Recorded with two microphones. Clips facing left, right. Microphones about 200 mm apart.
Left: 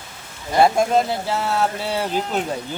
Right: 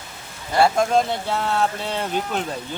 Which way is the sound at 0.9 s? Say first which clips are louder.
Left 1 dB; 5° left (ahead or behind).